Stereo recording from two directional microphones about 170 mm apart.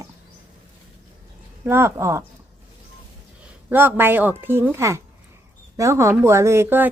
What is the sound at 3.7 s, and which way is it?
A woman's voice, 10° right (ahead or behind).